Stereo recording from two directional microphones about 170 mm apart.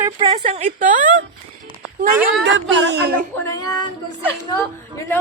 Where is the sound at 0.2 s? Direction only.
40° right (ahead or behind).